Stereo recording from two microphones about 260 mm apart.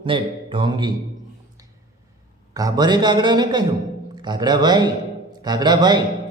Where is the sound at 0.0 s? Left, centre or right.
Centre.